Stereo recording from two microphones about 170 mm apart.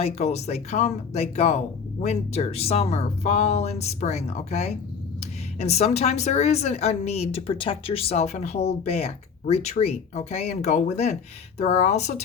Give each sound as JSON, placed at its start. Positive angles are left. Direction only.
{"t": 0.0, "sound": "speech", "side_deg": 40}